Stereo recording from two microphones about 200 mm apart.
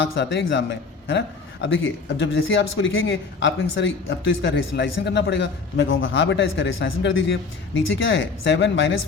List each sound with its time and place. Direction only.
0.0 s a man's voice: 60° left (ahead or behind)